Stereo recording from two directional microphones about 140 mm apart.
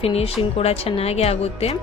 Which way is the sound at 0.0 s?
45° left (ahead or behind).